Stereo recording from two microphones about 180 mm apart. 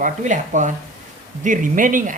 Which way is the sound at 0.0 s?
45° right (ahead or behind).